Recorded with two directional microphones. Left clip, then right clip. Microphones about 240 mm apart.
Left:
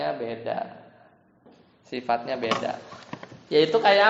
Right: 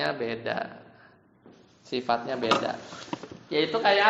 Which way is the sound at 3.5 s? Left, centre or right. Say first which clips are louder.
Left 6 dB; left.